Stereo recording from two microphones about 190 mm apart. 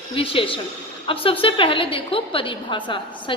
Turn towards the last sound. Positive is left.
turn(degrees=25)  # may be behind; listen again after turning